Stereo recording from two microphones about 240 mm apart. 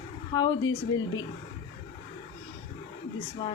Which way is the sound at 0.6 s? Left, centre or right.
Left.